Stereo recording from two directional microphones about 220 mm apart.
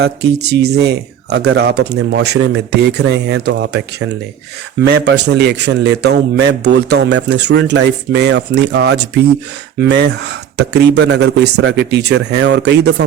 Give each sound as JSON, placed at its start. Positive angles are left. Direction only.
{"t": 0.0, "sound": "a man's voice", "side_deg": -50}